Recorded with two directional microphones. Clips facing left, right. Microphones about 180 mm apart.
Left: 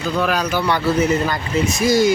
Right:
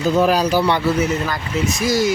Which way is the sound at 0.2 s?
35° right (ahead or behind).